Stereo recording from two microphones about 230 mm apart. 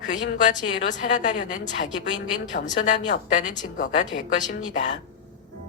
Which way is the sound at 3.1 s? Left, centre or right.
Left.